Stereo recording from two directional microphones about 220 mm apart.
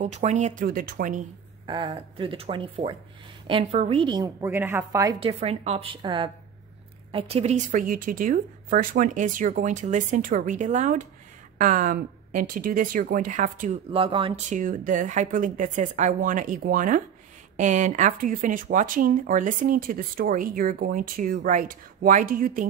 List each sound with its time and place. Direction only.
0.0 s speech: 30° right (ahead or behind)
1.7 s a woman's voice: 20° right (ahead or behind)
5.2 s speech: 25° right (ahead or behind)
13.8 s speech: 25° right (ahead or behind); by 22.7 s 40° right (ahead or behind)